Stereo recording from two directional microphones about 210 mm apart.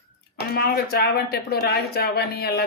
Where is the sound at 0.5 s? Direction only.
45° left (ahead or behind).